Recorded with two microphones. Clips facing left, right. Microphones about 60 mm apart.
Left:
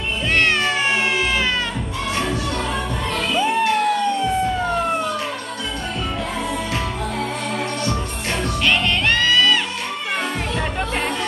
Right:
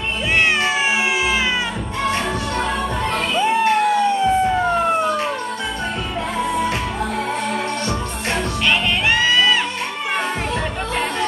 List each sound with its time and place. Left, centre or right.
3.4 s emergency vehicle: centre
8.6 s music: centre